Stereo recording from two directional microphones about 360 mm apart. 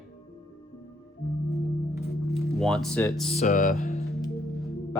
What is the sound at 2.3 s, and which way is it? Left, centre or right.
Speech, centre.